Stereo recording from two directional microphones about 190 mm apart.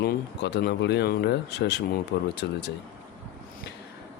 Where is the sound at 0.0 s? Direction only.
60° left (ahead or behind).